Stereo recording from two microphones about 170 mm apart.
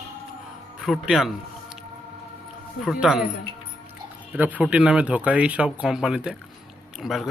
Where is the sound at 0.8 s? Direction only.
5° right (ahead or behind).